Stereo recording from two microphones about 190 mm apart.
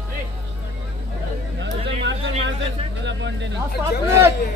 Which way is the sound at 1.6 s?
70° right (ahead or behind).